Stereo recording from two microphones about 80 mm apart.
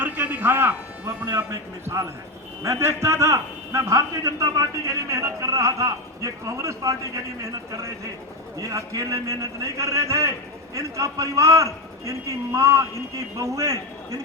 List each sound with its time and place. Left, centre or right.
0.0 s music: right
1.8 s a man's voice: right